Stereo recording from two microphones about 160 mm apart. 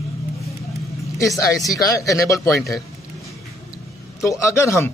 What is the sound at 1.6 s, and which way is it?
Speech, 20° left (ahead or behind).